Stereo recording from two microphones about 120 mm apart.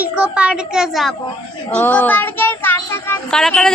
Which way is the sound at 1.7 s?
10° left (ahead or behind).